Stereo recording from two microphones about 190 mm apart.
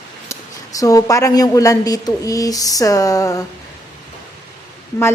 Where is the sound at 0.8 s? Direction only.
20° left (ahead or behind).